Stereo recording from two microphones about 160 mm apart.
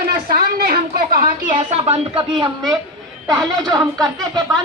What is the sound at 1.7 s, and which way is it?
A woman's voice, 35° right (ahead or behind).